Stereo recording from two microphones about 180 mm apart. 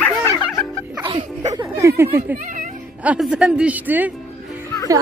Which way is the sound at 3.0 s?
5° right (ahead or behind).